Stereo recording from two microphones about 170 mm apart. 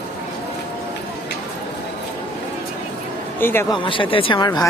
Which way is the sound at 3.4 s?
15° left (ahead or behind).